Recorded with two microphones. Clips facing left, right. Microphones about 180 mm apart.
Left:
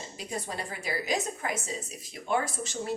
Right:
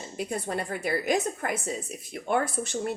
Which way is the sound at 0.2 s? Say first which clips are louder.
Right 6 dB; 55° right (ahead or behind).